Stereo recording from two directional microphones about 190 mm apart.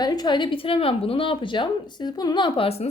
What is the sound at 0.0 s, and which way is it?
Speech, 20° left (ahead or behind).